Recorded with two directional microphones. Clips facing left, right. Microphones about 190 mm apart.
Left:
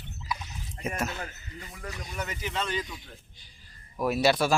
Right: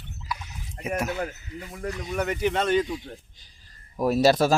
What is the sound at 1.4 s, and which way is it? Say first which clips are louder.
Speech: right 6 dB; 5° right (ahead or behind).